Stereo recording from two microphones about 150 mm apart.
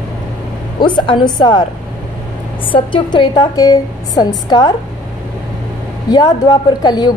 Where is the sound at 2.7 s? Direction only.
35° left (ahead or behind).